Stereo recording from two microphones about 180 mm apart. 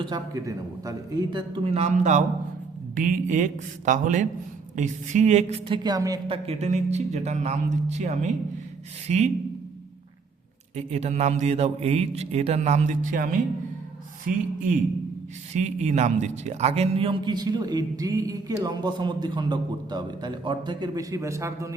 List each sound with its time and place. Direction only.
0.0 s a man's voice: 20° right (ahead or behind)
6.2 s a man's voice: 30° right (ahead or behind)
10.8 s a man's voice: 35° right (ahead or behind)
15.5 s a man's voice: 40° right (ahead or behind); by 21.8 s 15° right (ahead or behind)